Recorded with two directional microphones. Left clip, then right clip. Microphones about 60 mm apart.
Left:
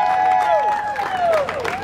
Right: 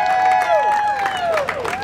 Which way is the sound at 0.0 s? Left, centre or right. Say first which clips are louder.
Right 1 dB; right.